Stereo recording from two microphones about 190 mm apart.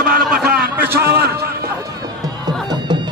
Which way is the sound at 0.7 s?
10° right (ahead or behind).